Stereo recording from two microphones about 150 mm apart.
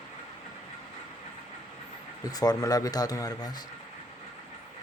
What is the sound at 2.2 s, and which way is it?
Speech, 25° left (ahead or behind).